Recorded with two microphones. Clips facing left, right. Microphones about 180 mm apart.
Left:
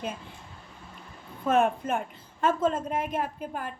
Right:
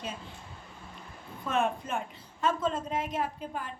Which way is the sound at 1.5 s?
50° left (ahead or behind).